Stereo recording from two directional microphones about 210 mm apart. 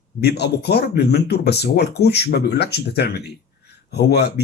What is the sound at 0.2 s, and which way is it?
Speech, 50° left (ahead or behind).